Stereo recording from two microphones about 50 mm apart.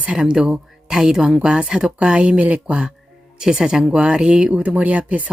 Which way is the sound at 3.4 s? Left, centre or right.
Centre.